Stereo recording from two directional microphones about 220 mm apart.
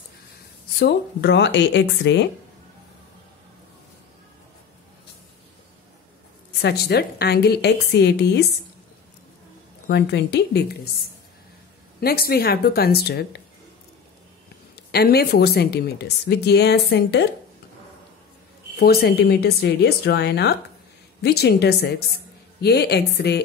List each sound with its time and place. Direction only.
0.7 s a woman's voice: 50° left (ahead or behind)
6.6 s a woman's voice: 50° left (ahead or behind)
9.8 s a woman's voice: 50° left (ahead or behind)
12.0 s a woman's voice: 45° left (ahead or behind)
14.9 s a woman's voice: 45° left (ahead or behind)
18.8 s a woman's voice: 45° left (ahead or behind)